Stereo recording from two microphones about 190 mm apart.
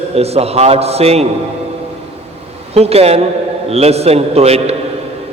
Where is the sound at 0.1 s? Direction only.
35° right (ahead or behind).